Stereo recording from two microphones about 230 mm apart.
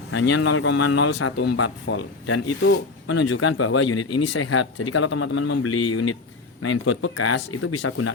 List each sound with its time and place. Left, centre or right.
0.1 s speech: left
1.5 s speech: left